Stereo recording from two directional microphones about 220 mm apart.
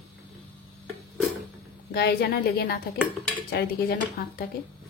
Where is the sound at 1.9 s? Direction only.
45° left (ahead or behind).